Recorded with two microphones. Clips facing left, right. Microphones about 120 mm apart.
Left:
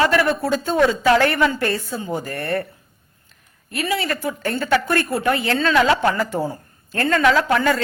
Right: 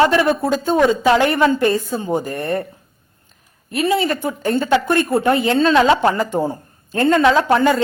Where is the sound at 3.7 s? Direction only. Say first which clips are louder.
Right 5 dB; 25° right (ahead or behind).